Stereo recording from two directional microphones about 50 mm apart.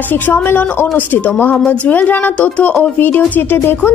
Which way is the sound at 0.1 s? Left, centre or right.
Left.